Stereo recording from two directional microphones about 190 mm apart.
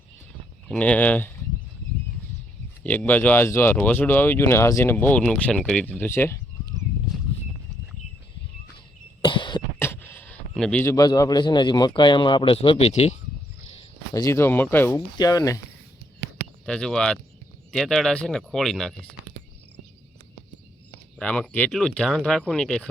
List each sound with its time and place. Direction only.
0.7 s speech: 5° left (ahead or behind)
2.8 s speech: 10° left (ahead or behind)
9.2 s cough: 25° left (ahead or behind)
9.7 s a sound: 10° left (ahead or behind)
11.9 s speech: 25° left (ahead or behind)
14.1 s speech: 15° left (ahead or behind)
16.6 s speech: 5° left (ahead or behind)
21.2 s speech: 5° left (ahead or behind)